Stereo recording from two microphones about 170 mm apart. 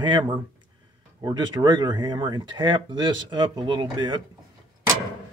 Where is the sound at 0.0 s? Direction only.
25° right (ahead or behind).